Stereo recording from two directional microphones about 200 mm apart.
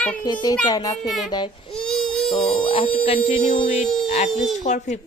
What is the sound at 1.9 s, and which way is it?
Baby cry, 5° left (ahead or behind).